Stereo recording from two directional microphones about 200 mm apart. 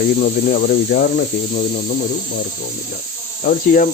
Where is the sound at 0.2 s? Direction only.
45° left (ahead or behind).